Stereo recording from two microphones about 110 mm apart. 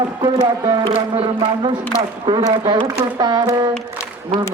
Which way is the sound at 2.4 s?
45° right (ahead or behind).